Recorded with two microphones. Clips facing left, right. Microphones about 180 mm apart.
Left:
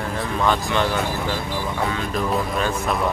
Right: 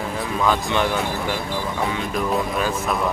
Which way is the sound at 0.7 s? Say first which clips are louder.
Even; 15° right (ahead or behind).